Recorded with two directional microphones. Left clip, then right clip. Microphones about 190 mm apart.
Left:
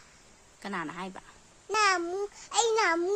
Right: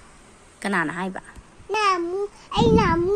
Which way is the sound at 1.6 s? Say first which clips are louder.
Right 5 dB; 15° left (ahead or behind).